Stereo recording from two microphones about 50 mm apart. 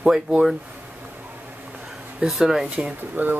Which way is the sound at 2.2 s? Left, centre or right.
Centre.